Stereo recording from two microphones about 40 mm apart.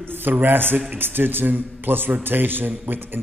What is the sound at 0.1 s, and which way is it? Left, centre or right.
A man's voice, right.